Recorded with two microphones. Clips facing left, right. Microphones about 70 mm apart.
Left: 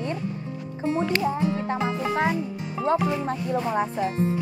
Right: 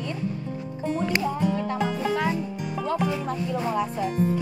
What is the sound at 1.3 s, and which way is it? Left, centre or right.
Speech, left.